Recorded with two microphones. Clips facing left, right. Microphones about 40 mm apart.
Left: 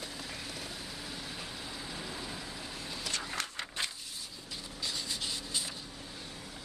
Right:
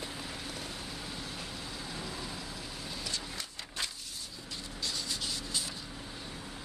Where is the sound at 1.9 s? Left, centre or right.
Centre.